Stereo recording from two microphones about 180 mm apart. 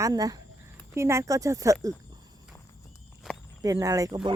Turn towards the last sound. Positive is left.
turn(degrees=-20)  # may be behind; listen again after turning